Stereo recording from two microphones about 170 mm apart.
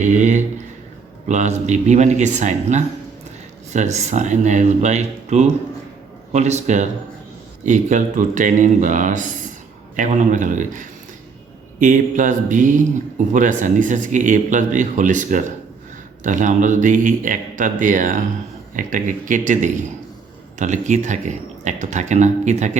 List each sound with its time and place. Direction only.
0.0 s speech: 45° right (ahead or behind)